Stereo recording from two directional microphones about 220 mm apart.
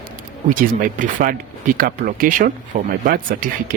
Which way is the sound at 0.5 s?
40° right (ahead or behind).